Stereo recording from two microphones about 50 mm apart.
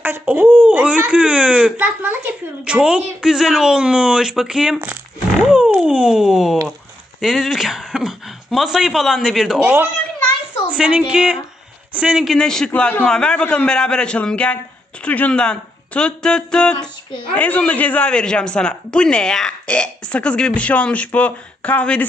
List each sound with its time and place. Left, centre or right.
0.0 s a child's voice: right
0.6 s speech: right
1.8 s a child's voice: right
2.6 s speech: right; by 9.6 s centre
9.6 s a child's voice: right
10.8 s speech: right
12.4 s speech: centre; by 15.3 s left
15.3 s speech: centre
17.3 s speech: left